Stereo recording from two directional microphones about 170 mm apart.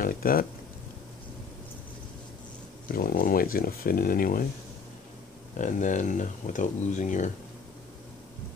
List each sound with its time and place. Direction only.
0.0 s a sound: 60° left (ahead or behind)
2.9 s speech: 60° left (ahead or behind)
5.6 s speech: 50° left (ahead or behind)